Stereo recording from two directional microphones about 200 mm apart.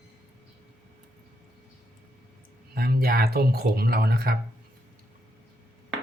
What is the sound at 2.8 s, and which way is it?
Speech, 50° right (ahead or behind).